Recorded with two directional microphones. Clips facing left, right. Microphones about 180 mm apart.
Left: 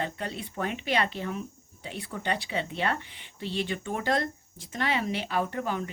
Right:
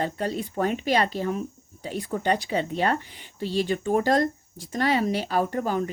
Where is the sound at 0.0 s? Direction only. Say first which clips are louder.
Right 6 dB; 40° right (ahead or behind).